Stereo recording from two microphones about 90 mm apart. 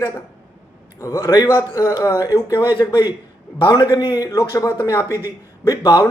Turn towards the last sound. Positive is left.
turn(degrees=45)  # may be behind; listen again after turning